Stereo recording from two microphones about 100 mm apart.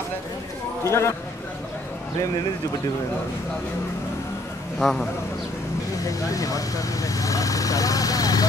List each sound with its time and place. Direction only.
0.8 s speech: 30° left (ahead or behind)
4.7 s a man's voice: 5° left (ahead or behind)
6.0 s speech: 35° left (ahead or behind)